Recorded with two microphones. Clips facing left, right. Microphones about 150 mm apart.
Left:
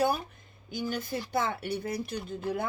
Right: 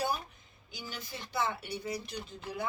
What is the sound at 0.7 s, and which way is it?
Speech, 50° left (ahead or behind).